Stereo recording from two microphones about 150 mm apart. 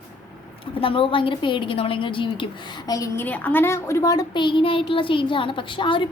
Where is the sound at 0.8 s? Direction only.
35° left (ahead or behind).